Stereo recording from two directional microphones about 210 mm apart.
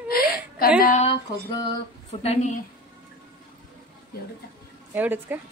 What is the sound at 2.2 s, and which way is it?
Speech, 30° left (ahead or behind).